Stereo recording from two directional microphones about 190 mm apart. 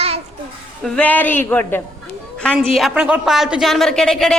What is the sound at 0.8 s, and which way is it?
A woman's voice, 5° left (ahead or behind).